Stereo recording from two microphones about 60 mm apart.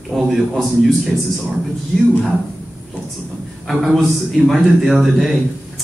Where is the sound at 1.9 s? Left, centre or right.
Centre.